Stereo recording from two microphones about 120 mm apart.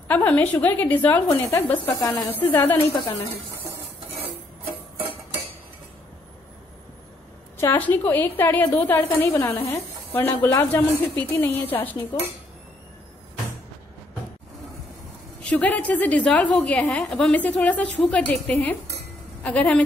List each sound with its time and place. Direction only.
0.1 s a woman's voice: 10° left (ahead or behind)
2.0 s a woman's voice: 30° left (ahead or behind)
2.3 s a woman's voice: 15° left (ahead or behind)
7.6 s a woman's voice: 15° left (ahead or behind)
15.4 s a woman's voice: 10° left (ahead or behind)